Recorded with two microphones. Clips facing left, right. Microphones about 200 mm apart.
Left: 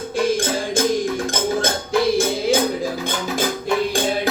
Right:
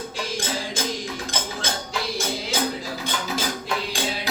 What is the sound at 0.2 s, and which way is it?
Music, 50° left (ahead or behind).